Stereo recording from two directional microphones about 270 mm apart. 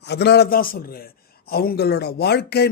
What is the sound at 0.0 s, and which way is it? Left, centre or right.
A man's voice, left.